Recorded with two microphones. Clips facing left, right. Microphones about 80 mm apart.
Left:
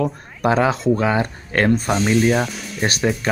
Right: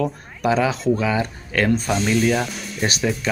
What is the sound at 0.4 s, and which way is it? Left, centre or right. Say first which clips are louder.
Speech: left 2 dB; left.